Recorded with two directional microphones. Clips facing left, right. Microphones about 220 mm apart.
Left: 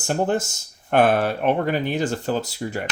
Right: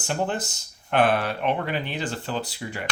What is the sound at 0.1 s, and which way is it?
Speech, 45° left (ahead or behind).